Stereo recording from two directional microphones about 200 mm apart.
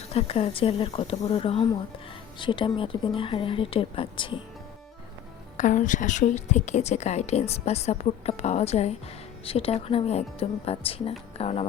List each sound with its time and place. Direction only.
0.1 s speech: 30° left (ahead or behind)
5.5 s a woman's voice: 40° left (ahead or behind)